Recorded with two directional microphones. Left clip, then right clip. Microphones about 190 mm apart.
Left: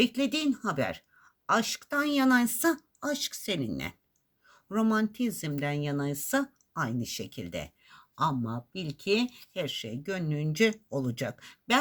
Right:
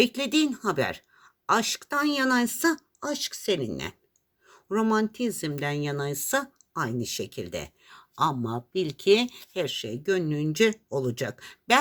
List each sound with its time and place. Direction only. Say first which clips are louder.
0.0 s speech: right 4 dB; 40° right (ahead or behind)